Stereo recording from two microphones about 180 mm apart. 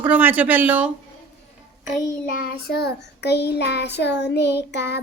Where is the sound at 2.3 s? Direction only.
55° left (ahead or behind).